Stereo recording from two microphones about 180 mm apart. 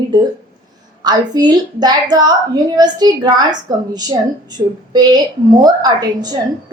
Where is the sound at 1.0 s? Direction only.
25° right (ahead or behind).